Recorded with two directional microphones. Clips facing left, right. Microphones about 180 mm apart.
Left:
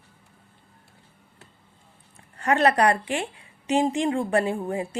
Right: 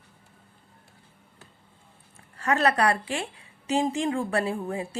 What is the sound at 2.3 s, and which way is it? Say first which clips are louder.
Speech: left 3 dB; 35° left (ahead or behind).